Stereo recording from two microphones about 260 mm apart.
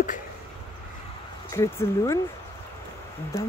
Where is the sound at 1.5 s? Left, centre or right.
Centre.